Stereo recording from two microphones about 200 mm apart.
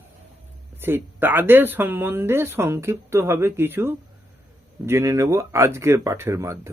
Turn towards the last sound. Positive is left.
turn(degrees=-15)  # may be behind; listen again after turning